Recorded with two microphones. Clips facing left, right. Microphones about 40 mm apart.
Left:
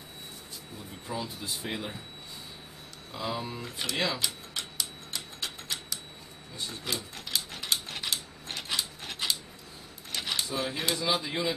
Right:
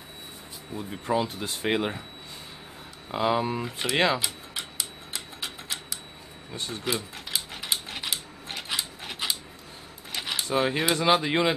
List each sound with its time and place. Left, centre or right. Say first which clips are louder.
1.1 s speech: right 8 dB; right
3.1 s speech: right 9 dB; right
3.6 s speech: right 5 dB; centre
3.9 s speech: right 7 dB; right
4.2 s tick-tock: right 1 dB; centre
6.8 s a sound: right 6 dB; centre
10.5 s speech: right 10 dB; right